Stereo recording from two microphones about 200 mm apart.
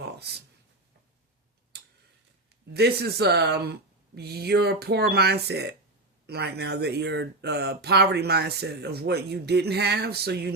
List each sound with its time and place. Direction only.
0.0 s a sound: 55° right (ahead or behind)
1.7 s tick-tock: 55° right (ahead or behind)
2.7 s speech: 55° right (ahead or behind)